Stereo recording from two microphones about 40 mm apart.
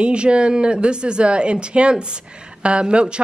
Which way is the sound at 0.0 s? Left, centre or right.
Right.